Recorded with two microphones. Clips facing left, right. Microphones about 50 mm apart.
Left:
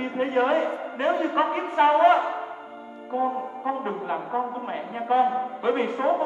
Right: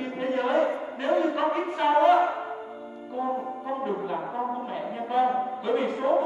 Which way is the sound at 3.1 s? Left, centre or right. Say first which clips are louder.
Left 3 dB; left.